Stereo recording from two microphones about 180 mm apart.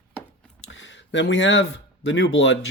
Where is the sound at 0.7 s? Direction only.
90° left.